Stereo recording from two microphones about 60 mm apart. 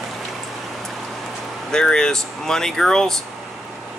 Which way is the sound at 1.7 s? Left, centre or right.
Centre.